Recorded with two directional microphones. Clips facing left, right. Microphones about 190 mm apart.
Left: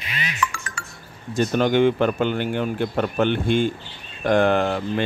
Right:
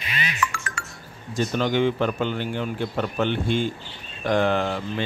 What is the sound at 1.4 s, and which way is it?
A man's voice, 55° left (ahead or behind).